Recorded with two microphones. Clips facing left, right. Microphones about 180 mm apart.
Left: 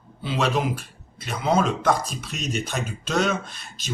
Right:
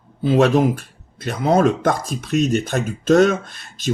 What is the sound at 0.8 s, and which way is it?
Speech, 55° right (ahead or behind).